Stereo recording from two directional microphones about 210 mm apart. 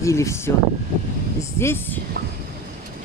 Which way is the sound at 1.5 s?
10° left (ahead or behind).